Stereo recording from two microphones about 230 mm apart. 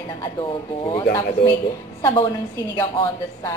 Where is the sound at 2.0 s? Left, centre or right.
Centre.